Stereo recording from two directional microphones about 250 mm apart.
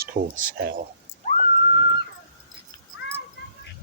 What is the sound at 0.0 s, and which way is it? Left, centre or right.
Speech, right.